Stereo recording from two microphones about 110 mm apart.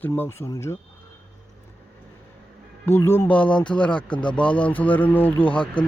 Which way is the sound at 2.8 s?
25° left (ahead or behind).